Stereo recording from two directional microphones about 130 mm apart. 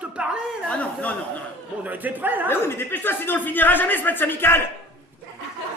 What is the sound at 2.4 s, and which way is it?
Speech, 15° left (ahead or behind).